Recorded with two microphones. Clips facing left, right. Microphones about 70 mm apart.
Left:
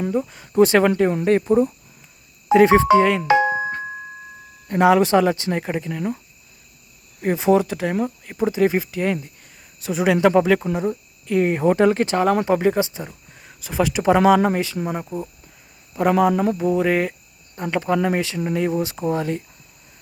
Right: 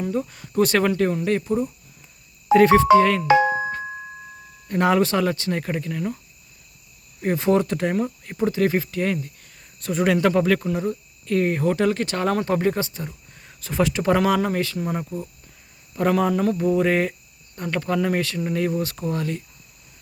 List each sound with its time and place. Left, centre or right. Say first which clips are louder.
0.1 s speech: left 3 dB; centre
1.1 s speech: left 5 dB; left
2.5 s speech: even; centre
4.7 s speech: left 4 dB; centre
7.2 s speech: left 2 dB; centre; by 12.1 s left
12.1 s speech: left 4 dB; centre
14.2 s speech: left 5 dB; left
15.9 s speech: left 3 dB; centre
16.6 s speech: even; centre
17.5 s speech: left 3 dB; centre